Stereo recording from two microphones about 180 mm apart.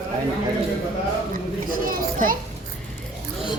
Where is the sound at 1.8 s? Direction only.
50° right (ahead or behind).